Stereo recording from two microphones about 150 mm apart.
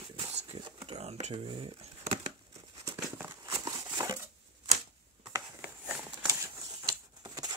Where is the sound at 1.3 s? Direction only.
35° right (ahead or behind).